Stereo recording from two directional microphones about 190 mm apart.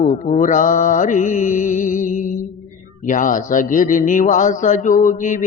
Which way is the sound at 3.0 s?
40° left (ahead or behind).